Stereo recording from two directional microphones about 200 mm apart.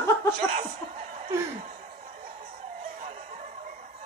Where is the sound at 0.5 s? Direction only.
35° right (ahead or behind).